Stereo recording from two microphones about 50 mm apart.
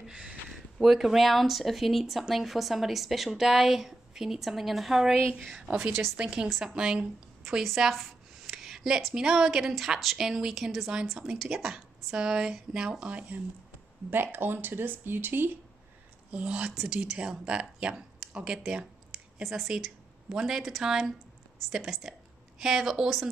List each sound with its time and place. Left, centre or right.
0.0 s a sound: centre
0.5 s a woman's voice: centre
7.6 s a sound: centre
9.1 s a woman's voice: centre
14.1 s speech: right
16.3 s speech: right